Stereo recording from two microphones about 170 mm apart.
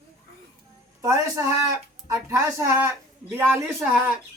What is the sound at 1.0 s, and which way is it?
A woman's voice, 20° right (ahead or behind).